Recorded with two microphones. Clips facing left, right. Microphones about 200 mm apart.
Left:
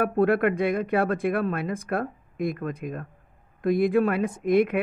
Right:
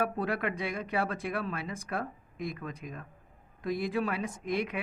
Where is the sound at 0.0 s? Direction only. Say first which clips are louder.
Left 10 dB; 55° left (ahead or behind).